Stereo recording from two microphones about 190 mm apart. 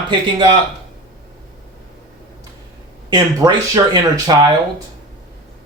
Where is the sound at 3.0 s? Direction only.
20° right (ahead or behind).